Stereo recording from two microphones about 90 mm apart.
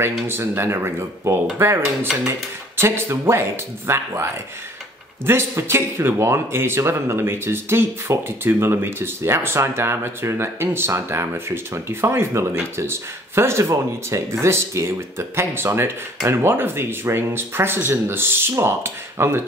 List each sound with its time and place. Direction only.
0.0 s speech: 30° right (ahead or behind)
2.8 s speech: 30° right (ahead or behind)